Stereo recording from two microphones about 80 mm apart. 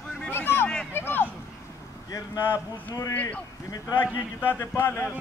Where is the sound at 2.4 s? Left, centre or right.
Left.